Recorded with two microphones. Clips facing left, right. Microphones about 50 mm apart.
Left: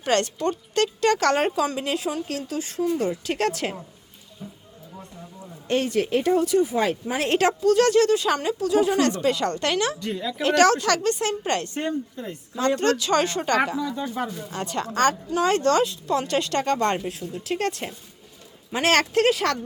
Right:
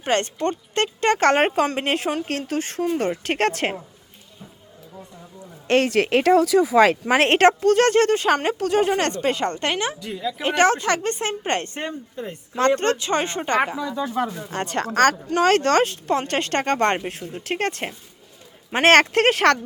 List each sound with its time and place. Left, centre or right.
0.0 s speech: right
5.6 s speech: right
7.3 s speech: right
10.0 s a woman's voice: centre
10.4 s a woman's voice: right
13.8 s speech: right
14.1 s speech: right